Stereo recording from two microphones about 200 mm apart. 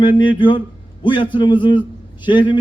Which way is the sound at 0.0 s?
25° left (ahead or behind).